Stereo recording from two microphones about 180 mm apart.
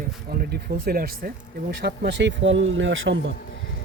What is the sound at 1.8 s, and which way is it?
Speech, 65° right (ahead or behind).